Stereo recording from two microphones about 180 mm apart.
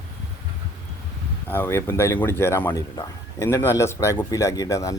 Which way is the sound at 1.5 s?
15° left (ahead or behind).